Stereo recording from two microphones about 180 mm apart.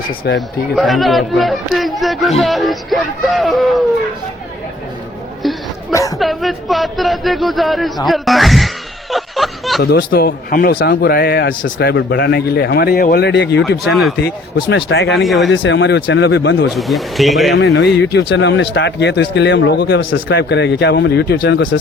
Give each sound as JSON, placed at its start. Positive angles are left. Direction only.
{"t": 0.3, "sound": "speech", "side_deg": 0}
{"t": 5.9, "sound": "a sound", "side_deg": 15}
{"t": 6.1, "sound": "speech", "side_deg": 0}
{"t": 9.1, "sound": "snicker", "side_deg": 0}
{"t": 9.8, "sound": "a man's voice", "side_deg": 60}
{"t": 14.5, "sound": "speech", "side_deg": 85}
{"t": 15.1, "sound": "speech", "side_deg": 0}
{"t": 15.4, "sound": "speech", "side_deg": 85}
{"t": 16.7, "sound": "speech", "side_deg": 0}
{"t": 17.5, "sound": "speech", "side_deg": 70}